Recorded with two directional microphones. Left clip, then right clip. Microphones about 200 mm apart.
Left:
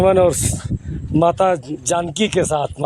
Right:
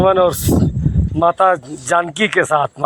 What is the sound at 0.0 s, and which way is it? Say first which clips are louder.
Speech: right 1 dB; 20° left (ahead or behind).